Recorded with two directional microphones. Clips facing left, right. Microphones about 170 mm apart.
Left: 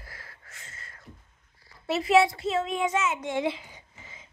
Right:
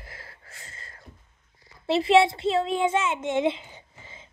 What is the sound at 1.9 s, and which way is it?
Speech, 30° right (ahead or behind).